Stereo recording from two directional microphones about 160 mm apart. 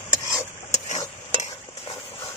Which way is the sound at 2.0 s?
30° left (ahead or behind).